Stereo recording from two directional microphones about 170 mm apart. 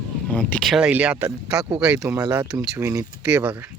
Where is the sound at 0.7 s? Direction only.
5° right (ahead or behind).